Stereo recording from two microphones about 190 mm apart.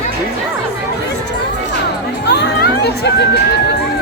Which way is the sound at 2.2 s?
60° left (ahead or behind).